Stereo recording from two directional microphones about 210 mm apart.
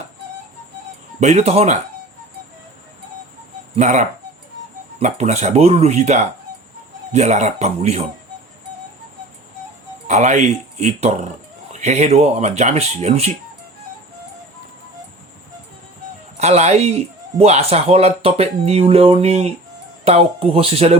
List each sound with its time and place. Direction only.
1.2 s speech: 30° right (ahead or behind)
3.8 s speech: 35° right (ahead or behind)
10.1 s speech: 35° right (ahead or behind)
16.4 s speech: 30° right (ahead or behind)